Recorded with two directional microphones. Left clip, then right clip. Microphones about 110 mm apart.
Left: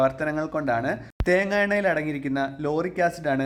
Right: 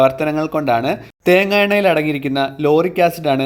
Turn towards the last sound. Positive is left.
turn(degrees=-20)  # may be behind; listen again after turning